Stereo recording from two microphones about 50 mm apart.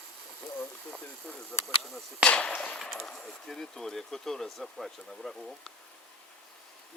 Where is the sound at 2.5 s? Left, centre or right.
Left.